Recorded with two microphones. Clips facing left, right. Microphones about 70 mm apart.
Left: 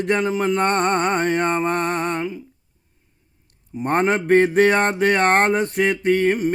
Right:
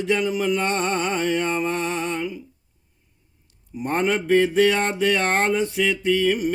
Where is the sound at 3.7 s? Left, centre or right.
Left.